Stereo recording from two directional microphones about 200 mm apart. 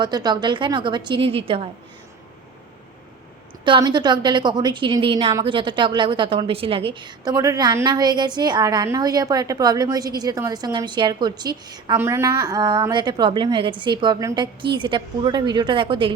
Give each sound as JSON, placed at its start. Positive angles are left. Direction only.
{"t": 0.0, "sound": "a woman's voice", "side_deg": -20}
{"t": 3.6, "sound": "a woman's voice", "side_deg": -25}